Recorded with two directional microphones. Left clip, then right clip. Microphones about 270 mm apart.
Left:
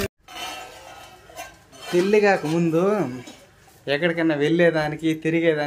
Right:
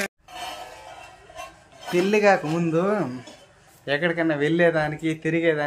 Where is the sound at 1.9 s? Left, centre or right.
Centre.